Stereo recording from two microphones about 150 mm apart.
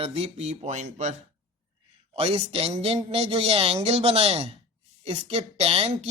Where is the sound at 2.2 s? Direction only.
40° right (ahead or behind).